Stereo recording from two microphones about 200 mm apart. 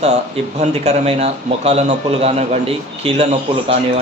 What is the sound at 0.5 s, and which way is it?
A man's voice, 30° right (ahead or behind).